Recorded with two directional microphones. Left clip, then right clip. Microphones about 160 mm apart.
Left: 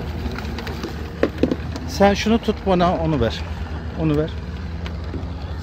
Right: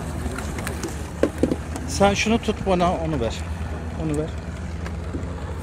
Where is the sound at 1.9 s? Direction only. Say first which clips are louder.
Left 2 dB; 35° left (ahead or behind).